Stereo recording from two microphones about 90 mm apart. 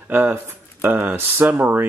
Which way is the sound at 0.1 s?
20° right (ahead or behind).